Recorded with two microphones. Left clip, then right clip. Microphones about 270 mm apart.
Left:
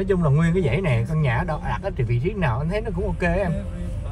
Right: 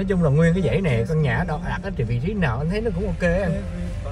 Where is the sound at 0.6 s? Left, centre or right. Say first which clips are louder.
Right 2 dB; left.